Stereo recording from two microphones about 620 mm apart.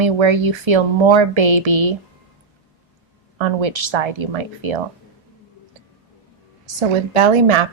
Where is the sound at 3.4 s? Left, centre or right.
Right.